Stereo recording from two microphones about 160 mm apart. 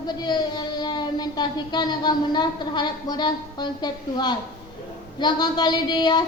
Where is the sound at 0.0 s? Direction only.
25° left (ahead or behind).